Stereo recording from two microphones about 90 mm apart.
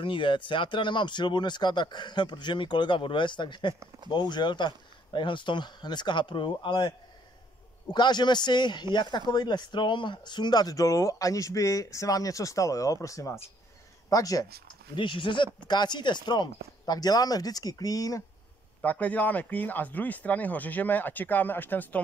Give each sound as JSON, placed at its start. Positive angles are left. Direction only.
{"t": 0.0, "sound": "speech", "side_deg": 70}
{"t": 7.9, "sound": "speech", "side_deg": 55}
{"t": 14.7, "sound": "speech", "side_deg": 65}
{"t": 18.8, "sound": "speech", "side_deg": 15}